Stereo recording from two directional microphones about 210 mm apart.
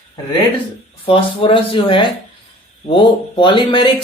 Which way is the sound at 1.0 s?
25° left (ahead or behind).